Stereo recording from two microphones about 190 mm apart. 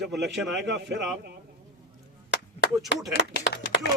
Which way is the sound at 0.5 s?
65° right (ahead or behind).